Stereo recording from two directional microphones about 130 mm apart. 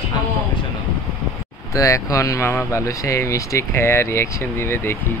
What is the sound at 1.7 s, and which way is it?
Speech, 25° left (ahead or behind).